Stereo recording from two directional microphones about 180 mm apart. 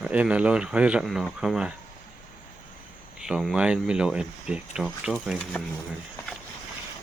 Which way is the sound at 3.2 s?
Centre (ahead or behind).